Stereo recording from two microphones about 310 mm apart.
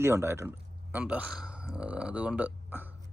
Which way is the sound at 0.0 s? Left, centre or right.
Centre.